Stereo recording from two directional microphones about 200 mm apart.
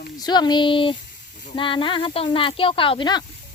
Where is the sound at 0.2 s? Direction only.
20° left (ahead or behind).